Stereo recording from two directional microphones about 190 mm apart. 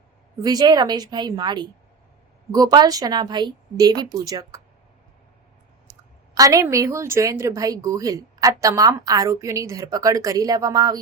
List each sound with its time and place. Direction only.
0.4 s speech: 20° right (ahead or behind)
6.3 s a woman's voice: 20° right (ahead or behind)